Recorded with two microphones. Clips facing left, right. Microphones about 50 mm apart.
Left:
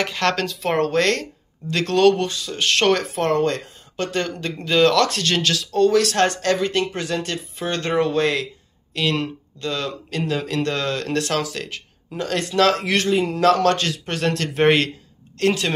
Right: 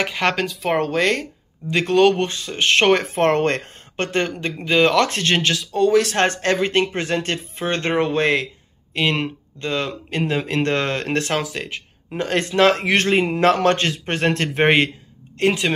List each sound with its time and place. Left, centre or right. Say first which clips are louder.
0.0 s speech: right 1 dB; centre
2.1 s speech: right 1 dB; right; by 5.9 s centre
5.9 s speech: even; right